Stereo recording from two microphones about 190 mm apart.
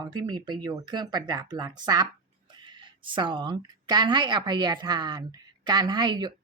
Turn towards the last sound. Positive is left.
turn(degrees=-25)  # may be behind; listen again after turning